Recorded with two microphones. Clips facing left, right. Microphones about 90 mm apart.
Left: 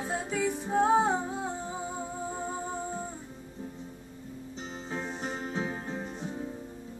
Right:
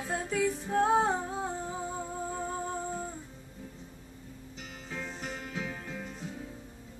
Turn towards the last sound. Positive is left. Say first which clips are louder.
# left 4 dB
turn(degrees=30)  # may be behind; listen again after turning